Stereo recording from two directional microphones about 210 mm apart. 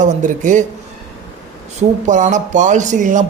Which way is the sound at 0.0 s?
35° right (ahead or behind).